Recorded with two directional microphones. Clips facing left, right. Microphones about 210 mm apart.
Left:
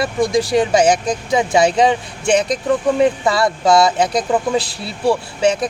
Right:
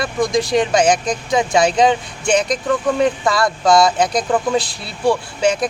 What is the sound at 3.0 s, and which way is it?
Speech, 5° left (ahead or behind).